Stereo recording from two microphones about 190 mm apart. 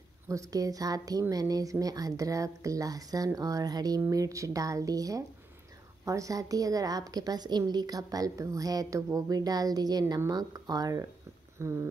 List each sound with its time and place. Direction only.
0.3 s a woman's voice: 15° right (ahead or behind)